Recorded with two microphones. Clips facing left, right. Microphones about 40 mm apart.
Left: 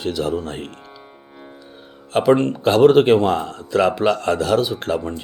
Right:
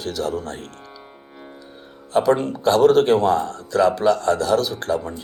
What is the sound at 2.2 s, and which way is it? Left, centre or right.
Speech, left.